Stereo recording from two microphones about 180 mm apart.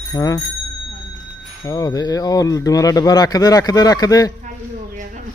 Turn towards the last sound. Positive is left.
turn(degrees=20)  # may be behind; listen again after turning